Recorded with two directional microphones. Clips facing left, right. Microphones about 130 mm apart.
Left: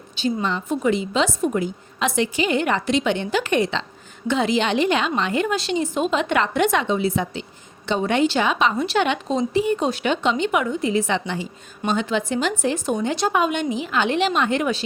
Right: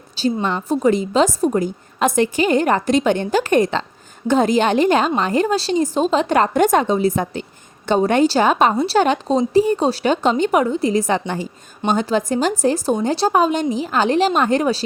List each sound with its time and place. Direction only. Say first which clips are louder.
0.2 s a woman's voice: right 3 dB; 35° right (ahead or behind)